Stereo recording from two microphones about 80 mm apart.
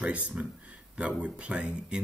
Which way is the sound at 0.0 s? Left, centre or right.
Centre.